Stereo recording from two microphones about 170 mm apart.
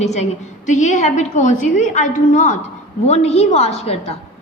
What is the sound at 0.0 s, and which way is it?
A woman's voice, 40° left (ahead or behind).